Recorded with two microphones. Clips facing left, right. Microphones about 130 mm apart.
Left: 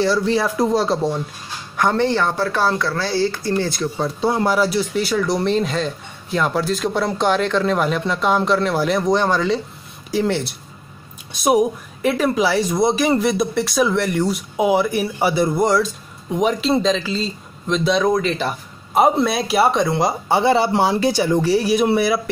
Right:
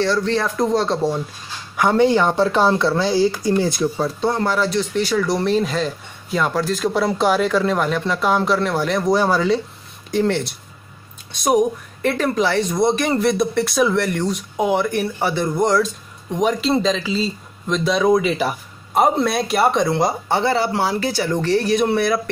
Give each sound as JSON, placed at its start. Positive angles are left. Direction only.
{"t": 0.0, "sound": "speech", "side_deg": 10}
{"t": 3.9, "sound": "speech", "side_deg": 0}
{"t": 20.2, "sound": "speech", "side_deg": 15}